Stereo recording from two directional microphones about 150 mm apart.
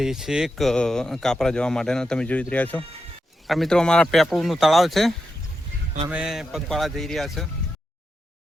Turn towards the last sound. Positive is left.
turn(degrees=0)  # may be behind; listen again after turning